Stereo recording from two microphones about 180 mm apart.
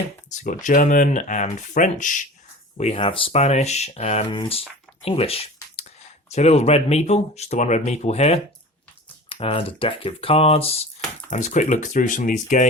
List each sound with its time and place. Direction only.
0.3 s speech: 45° left (ahead or behind)
2.7 s speech: 35° left (ahead or behind)